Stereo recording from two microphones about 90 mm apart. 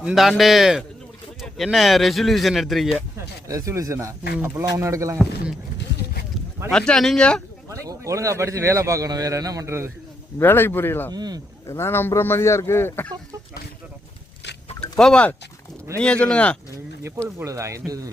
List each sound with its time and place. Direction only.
0.0 s speech: 5° right (ahead or behind)
3.5 s a man's voice: 35° right (ahead or behind)
6.7 s speech: 5° left (ahead or behind)
7.7 s a man's voice: 35° right (ahead or behind)
10.4 s speech: 25° left (ahead or behind)
11.1 s speech: 45° right (ahead or behind)
11.7 s speech: 25° left (ahead or behind)
14.9 s speech: 10° left (ahead or behind)
17.3 s a man's voice: 35° right (ahead or behind)